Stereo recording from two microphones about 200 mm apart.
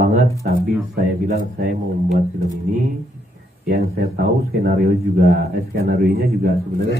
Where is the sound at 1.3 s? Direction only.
35° right (ahead or behind).